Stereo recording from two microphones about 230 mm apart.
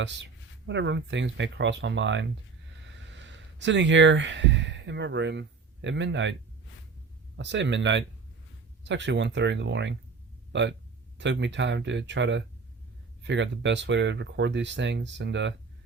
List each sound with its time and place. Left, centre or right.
0.0 s speech: right
7.3 s speech: right